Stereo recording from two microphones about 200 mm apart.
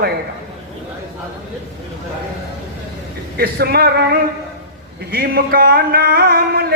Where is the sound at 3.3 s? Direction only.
50° right (ahead or behind).